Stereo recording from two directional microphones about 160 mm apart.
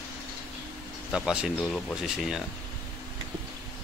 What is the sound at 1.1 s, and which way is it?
Speech, 5° right (ahead or behind).